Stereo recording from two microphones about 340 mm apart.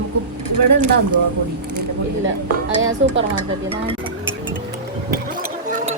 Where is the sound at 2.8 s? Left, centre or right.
Right.